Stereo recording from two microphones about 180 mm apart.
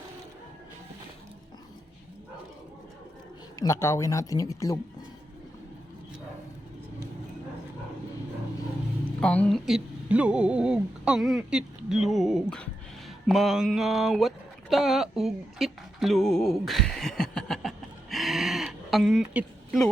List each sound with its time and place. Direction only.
3.5 s speech: 20° left (ahead or behind)
9.2 s speech: 5° left (ahead or behind)
13.2 s a sound: centre (ahead or behind)